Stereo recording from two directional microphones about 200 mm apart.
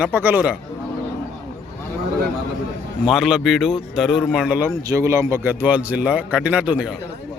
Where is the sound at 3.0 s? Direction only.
Centre (ahead or behind).